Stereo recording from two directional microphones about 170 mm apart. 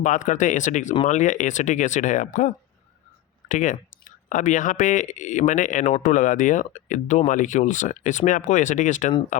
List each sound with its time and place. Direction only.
0.0 s speech: 50° left (ahead or behind)